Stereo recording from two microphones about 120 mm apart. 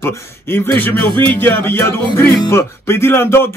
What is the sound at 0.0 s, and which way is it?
Speech, 20° left (ahead or behind).